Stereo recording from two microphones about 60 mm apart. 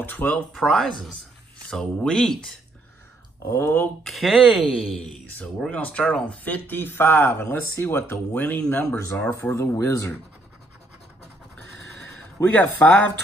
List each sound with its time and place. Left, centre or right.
0.0 s speech: left
0.6 s speech: centre
3.5 s speech: left
4.0 s speech: centre
5.7 s speech: left
9.6 s speech: left
12.4 s speech: left